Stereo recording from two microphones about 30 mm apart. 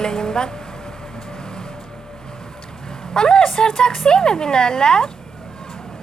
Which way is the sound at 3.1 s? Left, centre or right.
Left.